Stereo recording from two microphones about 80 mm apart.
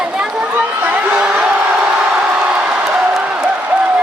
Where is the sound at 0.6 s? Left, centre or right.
Centre.